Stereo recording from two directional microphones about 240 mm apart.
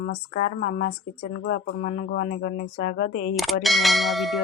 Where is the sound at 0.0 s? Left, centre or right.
Left.